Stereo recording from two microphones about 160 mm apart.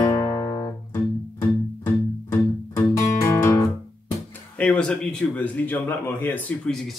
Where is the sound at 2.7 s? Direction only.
20° left (ahead or behind).